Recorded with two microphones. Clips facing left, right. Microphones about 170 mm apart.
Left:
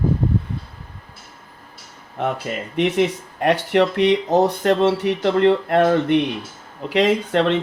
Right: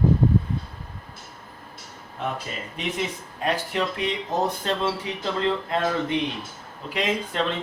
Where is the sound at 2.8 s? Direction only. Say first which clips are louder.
Left 11 dB; 70° left (ahead or behind).